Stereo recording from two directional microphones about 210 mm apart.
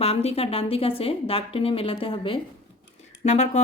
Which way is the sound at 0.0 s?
30° left (ahead or behind).